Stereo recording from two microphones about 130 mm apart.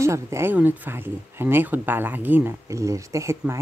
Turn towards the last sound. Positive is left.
turn(degrees=-20)  # may be behind; listen again after turning